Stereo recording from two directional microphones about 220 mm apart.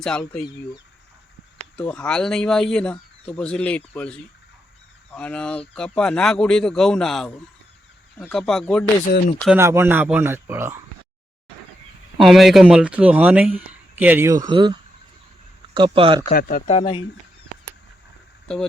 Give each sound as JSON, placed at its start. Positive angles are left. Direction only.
{"t": 0.0, "sound": "speech", "side_deg": 5}
{"t": 1.5, "sound": "speech", "side_deg": 5}
{"t": 12.2, "sound": "speech", "side_deg": 0}
{"t": 16.3, "sound": "speech", "side_deg": 40}
{"t": 16.6, "sound": "speech", "side_deg": 25}
{"t": 18.4, "sound": "speech", "side_deg": 5}